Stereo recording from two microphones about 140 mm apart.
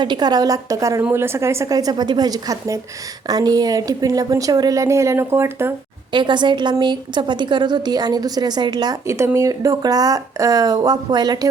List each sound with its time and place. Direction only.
0.0 s a woman's voice: 30° right (ahead or behind)
6.1 s a woman's voice: 35° right (ahead or behind)